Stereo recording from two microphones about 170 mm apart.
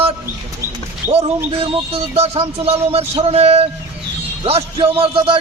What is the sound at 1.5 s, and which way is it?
Speech, 35° right (ahead or behind).